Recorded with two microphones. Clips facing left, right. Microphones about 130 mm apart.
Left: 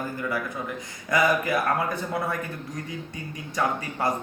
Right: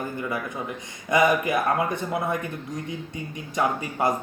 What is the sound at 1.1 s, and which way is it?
Speech, 20° right (ahead or behind).